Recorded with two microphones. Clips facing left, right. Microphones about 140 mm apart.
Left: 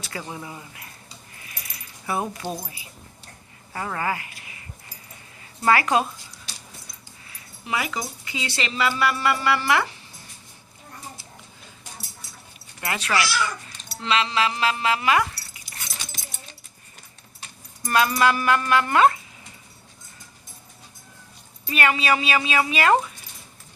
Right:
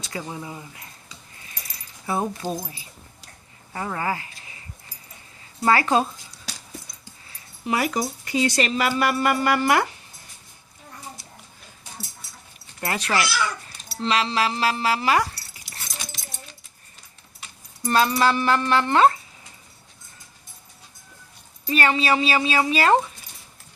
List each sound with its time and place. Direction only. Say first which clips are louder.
0.0 s speech: right 2 dB; 20° right (ahead or behind)
1.4 s keys jangling: left 1 dB; 30° right (ahead or behind)
3.7 s speech: even; 25° right (ahead or behind)
5.6 s speech: even; 30° right (ahead or behind)
7.3 s speech: right 4 dB; 40° right (ahead or behind)
12.8 s speech: right 1 dB; 35° right (ahead or behind)
17.8 s speech: right 1 dB; 30° right (ahead or behind)
21.7 s speech: right 1 dB; 30° right (ahead or behind)